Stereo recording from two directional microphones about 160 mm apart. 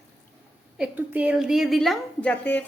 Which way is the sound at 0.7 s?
10° right (ahead or behind).